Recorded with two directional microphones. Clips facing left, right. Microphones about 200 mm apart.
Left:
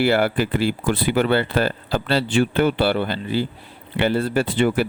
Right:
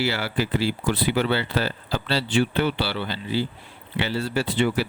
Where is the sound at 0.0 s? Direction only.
55° left (ahead or behind).